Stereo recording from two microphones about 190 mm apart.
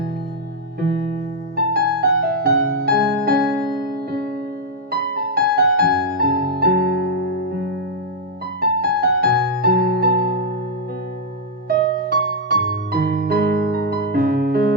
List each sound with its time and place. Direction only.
1.5 s music: 55° right (ahead or behind)
4.9 s music: 55° right (ahead or behind)
8.8 s music: 55° right (ahead or behind)
11.7 s music: 55° right (ahead or behind)